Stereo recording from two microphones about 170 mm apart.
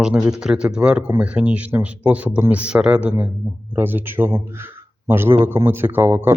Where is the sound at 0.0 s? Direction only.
5° right (ahead or behind).